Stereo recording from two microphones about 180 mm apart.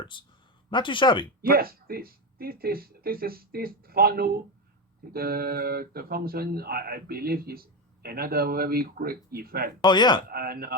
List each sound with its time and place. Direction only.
0.0 s speech: 25° left (ahead or behind)
1.4 s speech: 55° right (ahead or behind)
9.8 s speech: 25° left (ahead or behind)
10.2 s speech: 55° right (ahead or behind)